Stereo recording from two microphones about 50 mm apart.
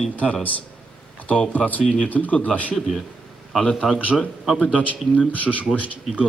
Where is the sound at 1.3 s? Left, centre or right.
Left.